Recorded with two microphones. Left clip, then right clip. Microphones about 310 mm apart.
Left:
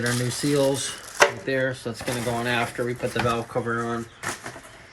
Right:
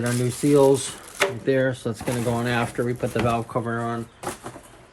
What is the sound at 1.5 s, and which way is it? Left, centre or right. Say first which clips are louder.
Speech: right 3 dB; right.